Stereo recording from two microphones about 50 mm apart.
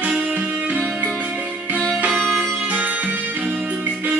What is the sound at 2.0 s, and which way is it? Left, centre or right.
Music, right.